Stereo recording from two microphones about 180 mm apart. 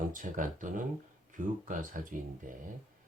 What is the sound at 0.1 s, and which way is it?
Speech, 45° right (ahead or behind).